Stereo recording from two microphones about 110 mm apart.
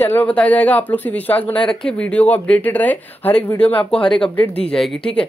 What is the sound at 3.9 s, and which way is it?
Speech, 50° left (ahead or behind).